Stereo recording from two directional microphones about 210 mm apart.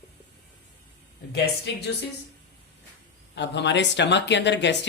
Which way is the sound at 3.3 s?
55° left (ahead or behind).